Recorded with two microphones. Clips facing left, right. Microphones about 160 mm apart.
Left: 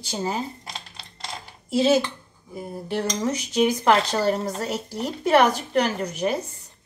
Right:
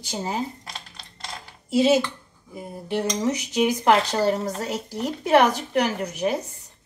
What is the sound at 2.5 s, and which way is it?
Cutlery, 20° right (ahead or behind).